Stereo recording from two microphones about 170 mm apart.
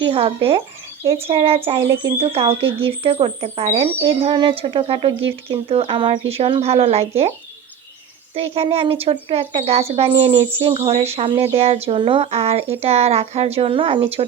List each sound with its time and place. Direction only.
0.1 s a woman's voice: 35° right (ahead or behind)
8.4 s a woman's voice: 35° right (ahead or behind)